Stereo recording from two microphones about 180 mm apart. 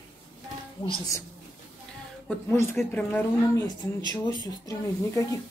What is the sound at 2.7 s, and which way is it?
Speech, 10° left (ahead or behind).